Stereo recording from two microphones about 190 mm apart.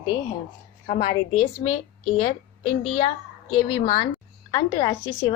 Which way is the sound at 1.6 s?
30° left (ahead or behind).